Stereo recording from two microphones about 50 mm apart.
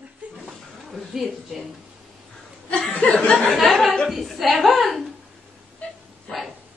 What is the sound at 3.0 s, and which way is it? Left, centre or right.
Laughter, left.